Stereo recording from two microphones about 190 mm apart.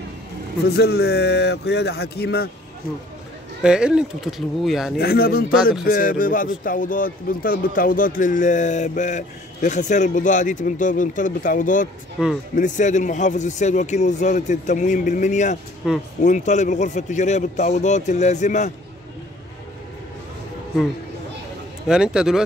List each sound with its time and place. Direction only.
0.7 s speech: 60° left (ahead or behind)
3.6 s speech: 5° right (ahead or behind)
4.9 s speech: 55° left (ahead or behind)
12.2 s speech: 5° right (ahead or behind)
12.5 s a man's voice: 40° left (ahead or behind)
15.8 s speech: 5° right (ahead or behind)
16.2 s a man's voice: 40° left (ahead or behind)
21.8 s speech: 5° right (ahead or behind)